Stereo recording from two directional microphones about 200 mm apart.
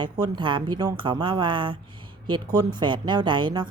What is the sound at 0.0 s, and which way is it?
Speech, 20° right (ahead or behind).